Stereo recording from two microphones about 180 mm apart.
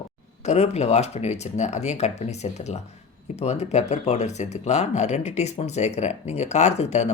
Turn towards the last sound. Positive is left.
turn(degrees=40)  # may be behind; listen again after turning